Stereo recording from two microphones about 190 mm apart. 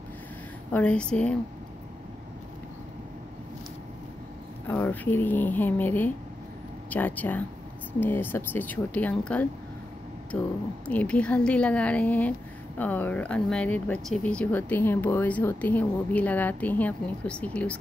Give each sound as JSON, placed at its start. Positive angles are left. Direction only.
{"t": 0.7, "sound": "speech", "side_deg": 5}
{"t": 4.6, "sound": "speech", "side_deg": 10}